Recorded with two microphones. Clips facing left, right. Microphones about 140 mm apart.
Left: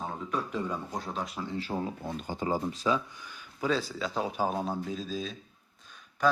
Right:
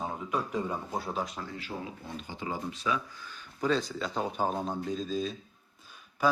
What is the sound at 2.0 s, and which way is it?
Speech, 45° left (ahead or behind).